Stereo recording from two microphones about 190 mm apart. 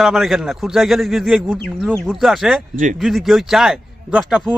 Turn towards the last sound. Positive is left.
turn(degrees=0)  # may be behind; listen again after turning